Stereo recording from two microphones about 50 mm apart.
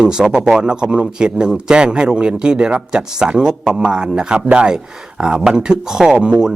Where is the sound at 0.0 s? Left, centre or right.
Centre.